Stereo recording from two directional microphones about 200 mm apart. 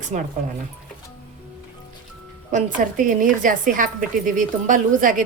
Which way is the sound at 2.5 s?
40° right (ahead or behind).